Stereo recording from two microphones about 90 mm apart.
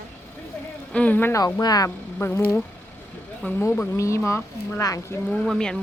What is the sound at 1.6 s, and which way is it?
Speech, 45° left (ahead or behind).